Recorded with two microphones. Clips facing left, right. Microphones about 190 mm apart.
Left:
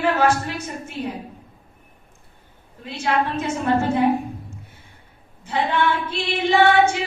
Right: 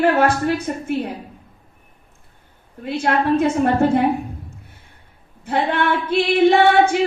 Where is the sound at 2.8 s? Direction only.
55° right (ahead or behind).